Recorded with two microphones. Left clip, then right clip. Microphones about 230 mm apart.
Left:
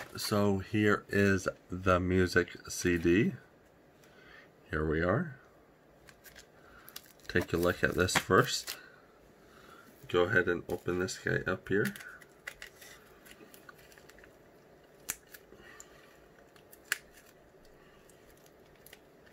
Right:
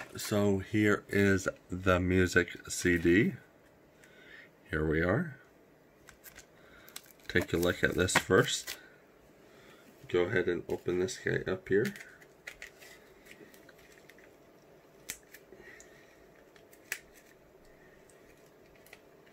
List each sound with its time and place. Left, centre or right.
0.1 s speech: centre
4.3 s a sound: centre
7.2 s speech: centre
10.1 s speech: centre
11.6 s speech: centre